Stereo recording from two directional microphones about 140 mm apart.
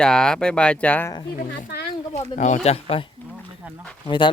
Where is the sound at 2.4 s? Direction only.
55° left (ahead or behind).